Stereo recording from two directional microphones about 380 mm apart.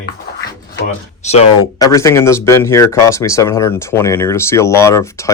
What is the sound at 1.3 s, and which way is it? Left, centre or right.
Speech, centre.